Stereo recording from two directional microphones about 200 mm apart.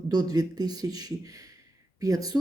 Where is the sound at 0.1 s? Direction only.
20° right (ahead or behind).